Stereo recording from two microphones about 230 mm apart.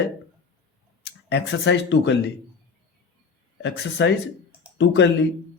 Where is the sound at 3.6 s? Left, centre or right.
Left.